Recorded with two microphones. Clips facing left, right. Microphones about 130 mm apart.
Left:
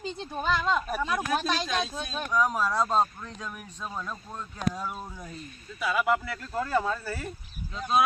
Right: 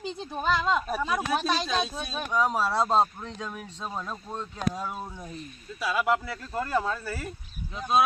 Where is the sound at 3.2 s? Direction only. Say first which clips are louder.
Right 3 dB; 20° right (ahead or behind).